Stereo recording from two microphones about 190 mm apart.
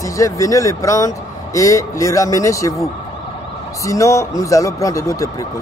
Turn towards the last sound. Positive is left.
turn(degrees=15)  # may be behind; listen again after turning